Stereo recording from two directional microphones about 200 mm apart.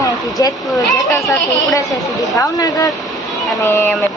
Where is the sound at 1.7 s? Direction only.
15° left (ahead or behind).